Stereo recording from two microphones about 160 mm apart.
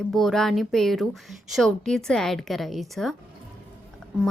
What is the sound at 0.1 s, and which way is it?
A woman's voice, centre (ahead or behind).